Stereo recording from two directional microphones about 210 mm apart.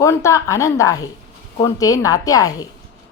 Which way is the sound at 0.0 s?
15° left (ahead or behind).